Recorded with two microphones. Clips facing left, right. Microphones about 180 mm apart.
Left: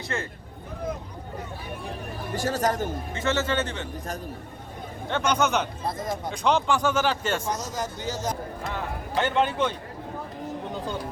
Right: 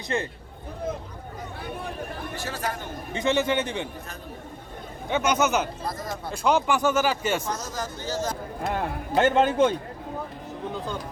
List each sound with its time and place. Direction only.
0.1 s speech: 20° right (ahead or behind)
2.3 s speech: 45° left (ahead or behind)
3.1 s a man's voice: 15° right (ahead or behind)
5.0 s a man's voice: 10° right (ahead or behind)
7.4 s speech: 15° left (ahead or behind)
8.6 s a man's voice: 50° right (ahead or behind)